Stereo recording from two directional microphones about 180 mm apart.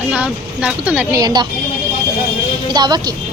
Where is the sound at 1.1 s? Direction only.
20° right (ahead or behind).